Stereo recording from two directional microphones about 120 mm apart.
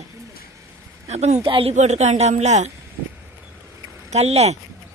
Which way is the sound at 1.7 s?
70° right (ahead or behind).